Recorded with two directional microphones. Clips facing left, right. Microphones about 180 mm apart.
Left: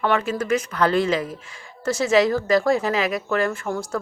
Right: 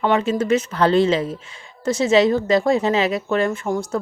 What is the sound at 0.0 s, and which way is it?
A woman's voice, 20° right (ahead or behind).